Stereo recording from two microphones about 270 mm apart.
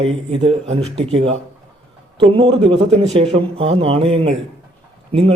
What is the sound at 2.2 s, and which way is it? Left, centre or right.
A man's voice, centre.